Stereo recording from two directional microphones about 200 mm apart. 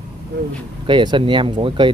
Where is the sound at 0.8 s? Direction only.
25° right (ahead or behind).